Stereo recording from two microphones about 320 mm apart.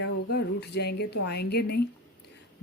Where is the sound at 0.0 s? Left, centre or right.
Left.